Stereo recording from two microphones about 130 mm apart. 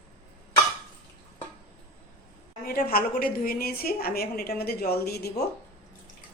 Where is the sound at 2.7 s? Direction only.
90° left.